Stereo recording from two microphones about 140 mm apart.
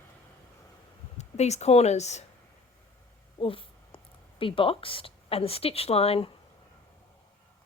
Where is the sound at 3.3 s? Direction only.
40° left (ahead or behind).